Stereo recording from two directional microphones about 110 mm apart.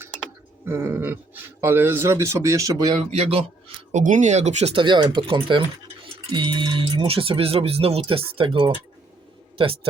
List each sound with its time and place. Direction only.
0.6 s speech: 20° right (ahead or behind)
2.9 s speech: 85° right
3.9 s speech: 90° right
4.7 s a man's voice: 45° right (ahead or behind)